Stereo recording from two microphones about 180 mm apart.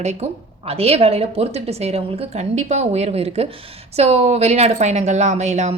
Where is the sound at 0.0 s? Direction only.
35° right (ahead or behind).